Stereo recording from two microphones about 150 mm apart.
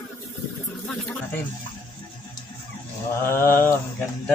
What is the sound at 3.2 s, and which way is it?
Mantra, 15° left (ahead or behind).